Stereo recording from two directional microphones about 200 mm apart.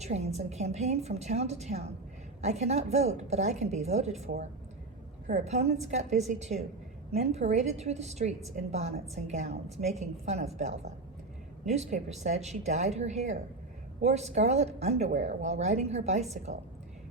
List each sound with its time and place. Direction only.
0.0 s a woman's voice: 35° right (ahead or behind)
5.3 s a woman's voice: 35° right (ahead or behind)